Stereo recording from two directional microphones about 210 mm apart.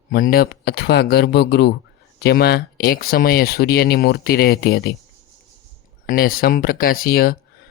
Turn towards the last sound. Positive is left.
turn(degrees=45)  # may be behind; listen again after turning